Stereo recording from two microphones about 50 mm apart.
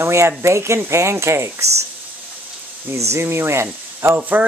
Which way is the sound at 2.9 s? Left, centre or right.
Right.